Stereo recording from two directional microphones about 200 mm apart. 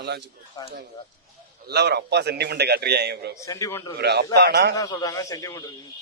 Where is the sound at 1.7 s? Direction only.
55° right (ahead or behind).